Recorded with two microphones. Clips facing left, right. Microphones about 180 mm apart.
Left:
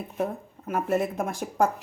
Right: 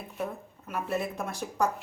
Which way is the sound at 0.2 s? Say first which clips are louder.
Left 5 dB; 50° left (ahead or behind).